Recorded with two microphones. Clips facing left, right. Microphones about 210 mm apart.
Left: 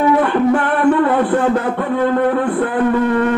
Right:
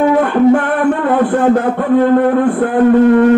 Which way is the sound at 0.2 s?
50° right (ahead or behind).